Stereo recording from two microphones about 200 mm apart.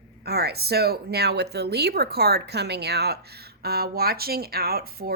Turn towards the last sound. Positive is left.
turn(degrees=-50)  # may be behind; listen again after turning